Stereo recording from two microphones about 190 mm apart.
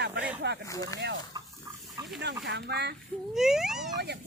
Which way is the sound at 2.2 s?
65° right (ahead or behind).